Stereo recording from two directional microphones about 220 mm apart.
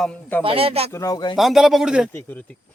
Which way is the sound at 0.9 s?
15° left (ahead or behind).